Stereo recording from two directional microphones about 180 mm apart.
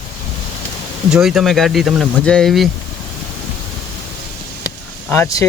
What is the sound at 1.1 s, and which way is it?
Speech, centre (ahead or behind).